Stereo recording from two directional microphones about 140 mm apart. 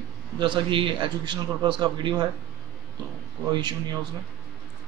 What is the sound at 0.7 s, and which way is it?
A man's voice, 35° right (ahead or behind).